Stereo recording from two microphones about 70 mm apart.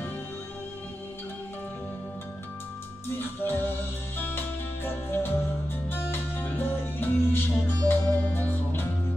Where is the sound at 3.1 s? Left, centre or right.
Left.